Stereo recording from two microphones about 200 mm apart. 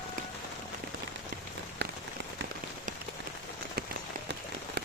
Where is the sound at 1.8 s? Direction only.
55° right (ahead or behind).